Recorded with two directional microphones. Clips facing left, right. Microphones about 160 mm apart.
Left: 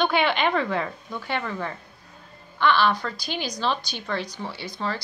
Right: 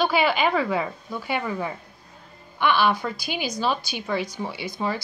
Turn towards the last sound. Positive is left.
turn(degrees=-10)  # may be behind; listen again after turning